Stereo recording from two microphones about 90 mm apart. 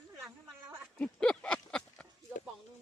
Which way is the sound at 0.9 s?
10° left (ahead or behind).